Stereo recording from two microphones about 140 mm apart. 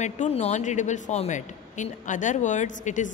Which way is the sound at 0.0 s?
55° left (ahead or behind).